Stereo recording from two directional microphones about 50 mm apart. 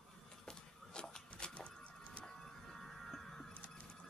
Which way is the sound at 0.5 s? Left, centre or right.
Centre.